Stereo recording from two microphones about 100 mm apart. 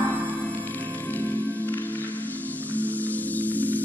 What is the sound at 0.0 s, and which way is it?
Music, 15° left (ahead or behind).